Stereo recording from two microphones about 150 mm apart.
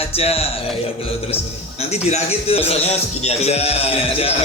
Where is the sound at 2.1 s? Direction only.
45° left (ahead or behind).